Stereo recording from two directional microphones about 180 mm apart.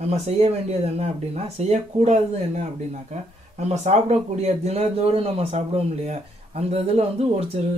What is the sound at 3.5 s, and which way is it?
Speech, 35° right (ahead or behind).